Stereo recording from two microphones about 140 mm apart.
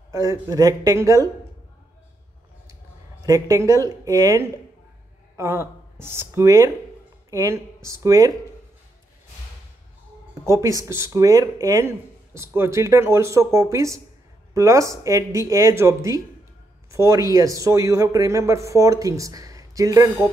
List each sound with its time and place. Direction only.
0.1 s a man's voice: 20° right (ahead or behind)
3.3 s a man's voice: 20° right (ahead or behind)
10.4 s a man's voice: 20° right (ahead or behind)